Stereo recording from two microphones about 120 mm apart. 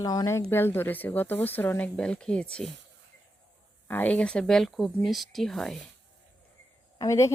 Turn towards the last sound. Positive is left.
turn(degrees=25)  # may be behind; listen again after turning